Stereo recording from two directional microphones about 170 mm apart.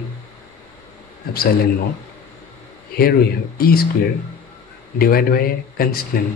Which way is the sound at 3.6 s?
60° left (ahead or behind).